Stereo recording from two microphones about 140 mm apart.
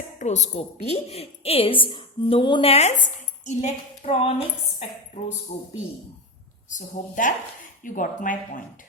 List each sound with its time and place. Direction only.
0.2 s a woman's voice: 55° left (ahead or behind)
6.7 s a woman's voice: 70° left (ahead or behind)